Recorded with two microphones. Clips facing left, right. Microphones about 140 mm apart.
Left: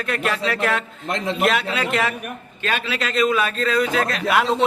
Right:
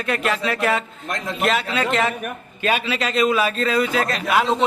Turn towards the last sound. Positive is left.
turn(degrees=0)  # may be behind; listen again after turning